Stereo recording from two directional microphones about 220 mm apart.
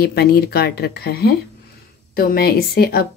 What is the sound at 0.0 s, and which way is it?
Speech, 45° left (ahead or behind).